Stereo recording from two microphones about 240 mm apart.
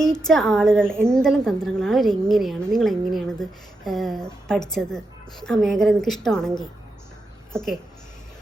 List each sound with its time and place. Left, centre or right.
0.3 s a woman's voice: centre